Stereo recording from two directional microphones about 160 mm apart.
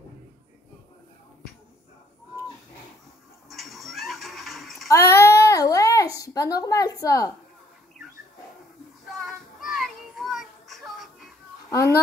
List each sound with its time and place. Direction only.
3.4 s cat: centre (ahead or behind)
4.8 s babbling: 20° left (ahead or behind)
9.0 s children playing: centre (ahead or behind)
11.7 s a child's voice: 20° left (ahead or behind)